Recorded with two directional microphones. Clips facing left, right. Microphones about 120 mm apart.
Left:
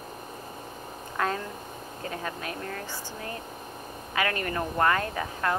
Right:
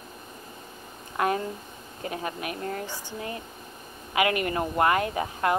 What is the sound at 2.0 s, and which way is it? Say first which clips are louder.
Speech: right 3 dB; 20° right (ahead or behind).